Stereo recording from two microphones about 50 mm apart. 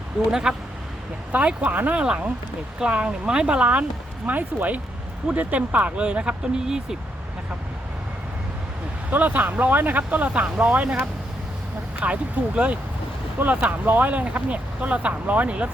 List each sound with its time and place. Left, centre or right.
0.3 s speech: centre
1.6 s speech: right; by 6.8 s centre
9.0 s speech: right
11.9 s speech: right